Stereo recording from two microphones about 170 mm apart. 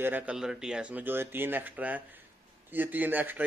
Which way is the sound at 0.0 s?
10° right (ahead or behind).